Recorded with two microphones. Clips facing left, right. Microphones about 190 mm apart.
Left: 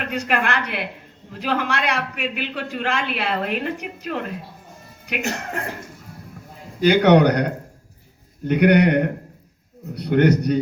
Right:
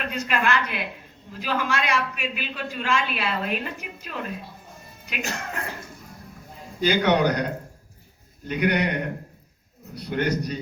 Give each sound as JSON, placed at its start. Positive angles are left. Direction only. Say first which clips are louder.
{"t": 0.0, "sound": "a man's voice", "louder": "left 3 dB", "side_deg": 65}
{"t": 6.8, "sound": "a man's voice", "louder": "left 6 dB", "side_deg": 65}